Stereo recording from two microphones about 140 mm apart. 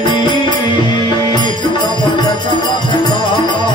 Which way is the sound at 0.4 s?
35° left (ahead or behind).